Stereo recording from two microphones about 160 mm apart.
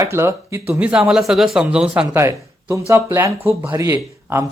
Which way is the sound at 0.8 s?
5° right (ahead or behind).